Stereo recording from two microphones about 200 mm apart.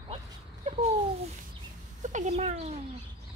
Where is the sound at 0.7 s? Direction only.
35° right (ahead or behind).